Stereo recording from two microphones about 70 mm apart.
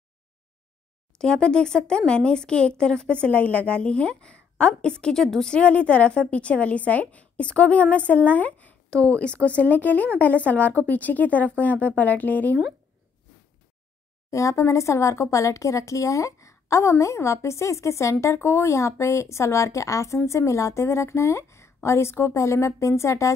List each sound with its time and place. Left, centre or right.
1.1 s a woman's voice: centre
14.3 s a woman's voice: left